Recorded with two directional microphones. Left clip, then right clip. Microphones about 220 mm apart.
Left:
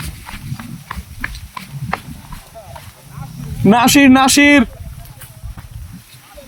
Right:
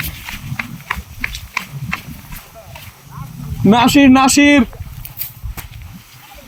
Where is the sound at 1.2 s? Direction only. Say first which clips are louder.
Right 5 dB; 50° right (ahead or behind).